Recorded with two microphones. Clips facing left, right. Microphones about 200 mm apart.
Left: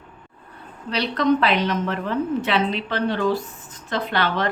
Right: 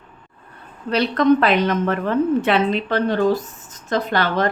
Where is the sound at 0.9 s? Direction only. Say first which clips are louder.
Right 4 dB; 50° right (ahead or behind).